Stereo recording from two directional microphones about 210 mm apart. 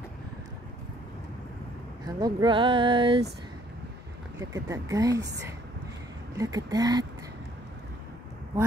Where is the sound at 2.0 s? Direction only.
20° right (ahead or behind).